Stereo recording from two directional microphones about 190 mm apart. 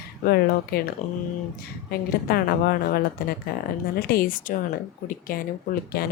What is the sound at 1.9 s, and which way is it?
Speech, 55° left (ahead or behind).